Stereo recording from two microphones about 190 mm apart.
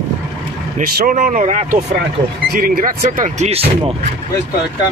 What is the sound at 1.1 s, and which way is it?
Speech, 40° right (ahead or behind).